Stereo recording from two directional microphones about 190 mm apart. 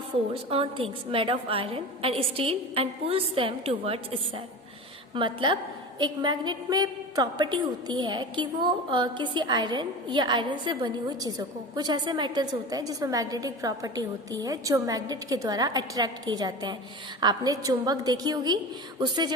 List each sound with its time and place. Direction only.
0.1 s a woman's voice: 30° right (ahead or behind)